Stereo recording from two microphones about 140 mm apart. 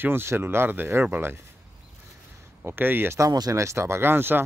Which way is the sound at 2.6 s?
15° right (ahead or behind).